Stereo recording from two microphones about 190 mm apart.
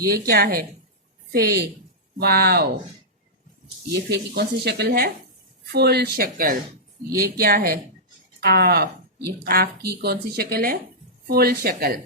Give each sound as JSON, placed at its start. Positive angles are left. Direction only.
{"t": 0.3, "sound": "speech", "side_deg": -55}
{"t": 4.1, "sound": "speech", "side_deg": -60}